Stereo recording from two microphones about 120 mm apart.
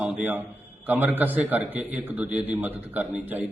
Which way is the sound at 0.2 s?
15° right (ahead or behind).